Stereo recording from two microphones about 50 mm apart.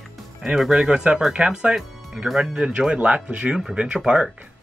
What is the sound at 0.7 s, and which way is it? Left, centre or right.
Speech, centre.